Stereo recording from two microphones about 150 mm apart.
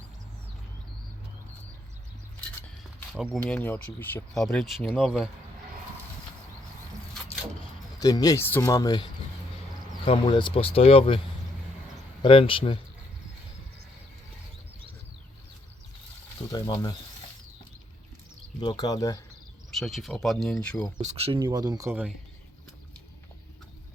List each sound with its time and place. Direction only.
3.1 s speech: centre (ahead or behind)
3.4 s speech: 10° left (ahead or behind)
7.9 s speech: 25° left (ahead or behind)
10.1 s speech: 35° left (ahead or behind)
12.2 s speech: 35° left (ahead or behind)
16.5 s speech: 25° left (ahead or behind)
18.6 s speech: 30° left (ahead or behind)
19.7 s speech: centre (ahead or behind)
21.0 s speech: 45° right (ahead or behind)
21.3 s speech: 25° right (ahead or behind)